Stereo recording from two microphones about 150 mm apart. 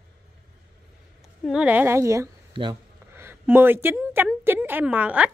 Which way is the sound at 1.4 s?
5° right (ahead or behind).